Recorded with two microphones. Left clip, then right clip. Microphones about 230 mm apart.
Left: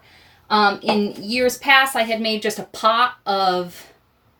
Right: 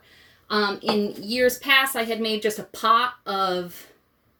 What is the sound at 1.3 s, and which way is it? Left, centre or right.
Speech, right.